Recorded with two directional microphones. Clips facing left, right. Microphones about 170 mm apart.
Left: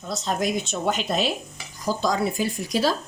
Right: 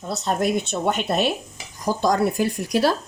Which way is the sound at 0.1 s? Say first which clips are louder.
Right 3 dB; 60° right (ahead or behind).